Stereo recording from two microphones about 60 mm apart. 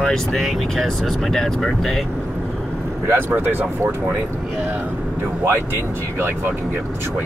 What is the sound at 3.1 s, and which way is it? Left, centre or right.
Speech, right.